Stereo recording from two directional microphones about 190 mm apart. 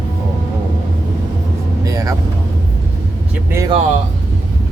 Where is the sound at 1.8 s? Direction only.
15° right (ahead or behind).